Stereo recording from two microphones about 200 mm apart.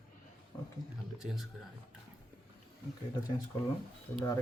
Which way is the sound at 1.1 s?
Centre (ahead or behind).